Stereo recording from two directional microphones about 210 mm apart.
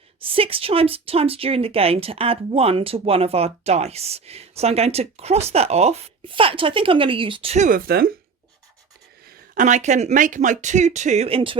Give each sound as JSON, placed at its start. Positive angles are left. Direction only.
{"t": 0.2, "sound": "speech", "side_deg": -25}
{"t": 7.9, "sound": "speech", "side_deg": -45}
{"t": 9.6, "sound": "speech", "side_deg": -35}